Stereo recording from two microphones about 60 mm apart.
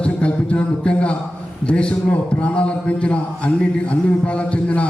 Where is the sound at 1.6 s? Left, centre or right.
Centre.